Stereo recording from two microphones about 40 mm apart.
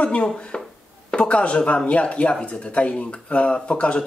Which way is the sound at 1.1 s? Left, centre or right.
Left.